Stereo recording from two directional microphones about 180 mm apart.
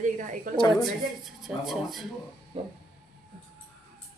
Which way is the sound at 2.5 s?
35° right (ahead or behind).